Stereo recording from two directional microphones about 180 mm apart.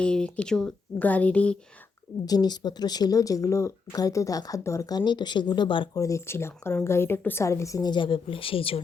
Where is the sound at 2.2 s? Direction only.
20° left (ahead or behind).